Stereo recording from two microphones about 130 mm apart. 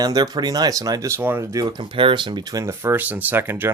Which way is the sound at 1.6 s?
40° right (ahead or behind).